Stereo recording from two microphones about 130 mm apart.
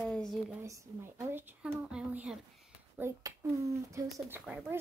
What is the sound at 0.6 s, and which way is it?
Speech, 25° right (ahead or behind).